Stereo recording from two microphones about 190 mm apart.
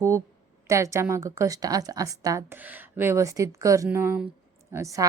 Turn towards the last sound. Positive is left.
turn(degrees=-15)  # may be behind; listen again after turning